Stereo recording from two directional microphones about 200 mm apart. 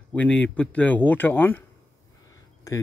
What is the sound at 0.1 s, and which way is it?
Speech, 5° left (ahead or behind).